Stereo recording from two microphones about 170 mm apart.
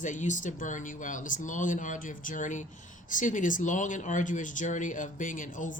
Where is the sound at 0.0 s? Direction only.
45° left (ahead or behind).